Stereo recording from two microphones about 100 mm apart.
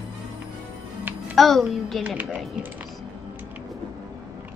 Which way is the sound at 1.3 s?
Centre (ahead or behind).